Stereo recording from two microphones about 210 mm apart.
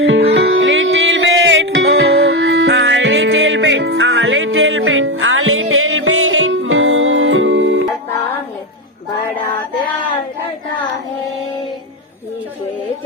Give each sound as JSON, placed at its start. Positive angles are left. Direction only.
{"t": 0.0, "sound": "music", "side_deg": -70}